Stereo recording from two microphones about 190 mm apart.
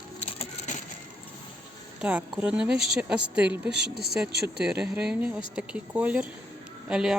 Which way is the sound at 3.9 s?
55° left (ahead or behind).